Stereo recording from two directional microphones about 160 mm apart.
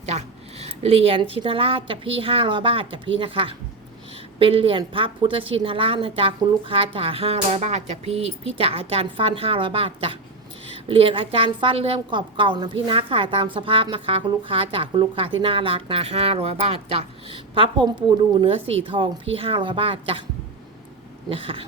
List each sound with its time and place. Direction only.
0.0 s a woman's voice: 40° right (ahead or behind)
21.2 s a woman's voice: 35° right (ahead or behind)